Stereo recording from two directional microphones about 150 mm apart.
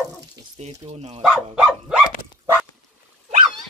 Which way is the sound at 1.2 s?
Centre (ahead or behind).